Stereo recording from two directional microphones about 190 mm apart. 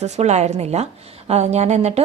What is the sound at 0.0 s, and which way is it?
A woman's voice, 35° right (ahead or behind).